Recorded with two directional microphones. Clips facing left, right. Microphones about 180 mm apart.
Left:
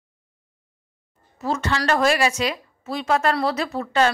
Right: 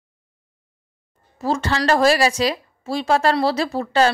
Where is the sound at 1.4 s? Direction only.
35° right (ahead or behind).